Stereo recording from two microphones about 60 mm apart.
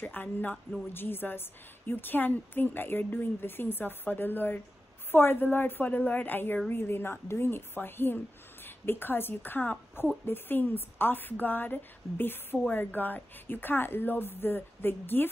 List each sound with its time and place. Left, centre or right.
0.0 s a woman's voice: left